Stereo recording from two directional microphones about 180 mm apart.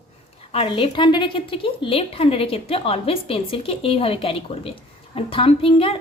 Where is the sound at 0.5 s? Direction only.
30° left (ahead or behind).